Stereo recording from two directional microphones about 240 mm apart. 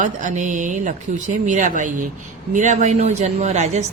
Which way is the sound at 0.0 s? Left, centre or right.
Right.